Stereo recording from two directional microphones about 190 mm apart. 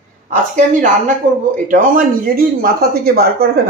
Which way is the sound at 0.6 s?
40° right (ahead or behind).